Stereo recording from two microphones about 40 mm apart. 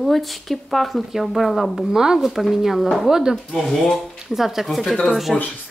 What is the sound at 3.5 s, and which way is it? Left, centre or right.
Speech, centre.